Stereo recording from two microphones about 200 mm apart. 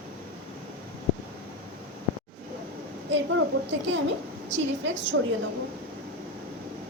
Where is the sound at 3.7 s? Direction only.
65° right (ahead or behind).